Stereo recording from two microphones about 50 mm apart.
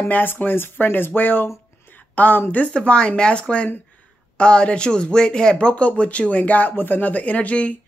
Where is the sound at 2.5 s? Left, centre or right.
Left.